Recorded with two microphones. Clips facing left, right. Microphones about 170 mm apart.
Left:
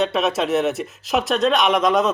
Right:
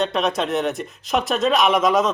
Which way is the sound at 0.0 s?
Centre (ahead or behind).